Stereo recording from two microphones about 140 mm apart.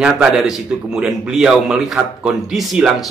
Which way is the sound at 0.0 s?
5° right (ahead or behind).